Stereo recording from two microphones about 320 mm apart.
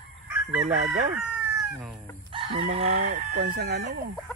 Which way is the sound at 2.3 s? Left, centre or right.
Centre.